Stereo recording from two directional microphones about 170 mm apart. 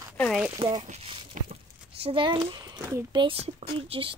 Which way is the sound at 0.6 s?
30° right (ahead or behind).